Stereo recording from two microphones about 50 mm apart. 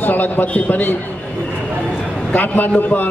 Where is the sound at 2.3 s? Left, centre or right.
Left.